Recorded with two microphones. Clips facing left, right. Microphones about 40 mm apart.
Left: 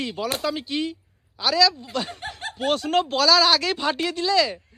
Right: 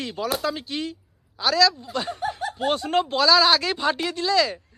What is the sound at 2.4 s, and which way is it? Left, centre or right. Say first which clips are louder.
Snicker: right 3 dB; left.